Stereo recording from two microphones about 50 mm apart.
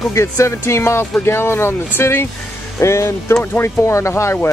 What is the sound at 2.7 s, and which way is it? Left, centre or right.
Speech, left.